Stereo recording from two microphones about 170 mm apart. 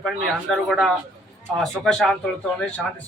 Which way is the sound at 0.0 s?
Centre (ahead or behind).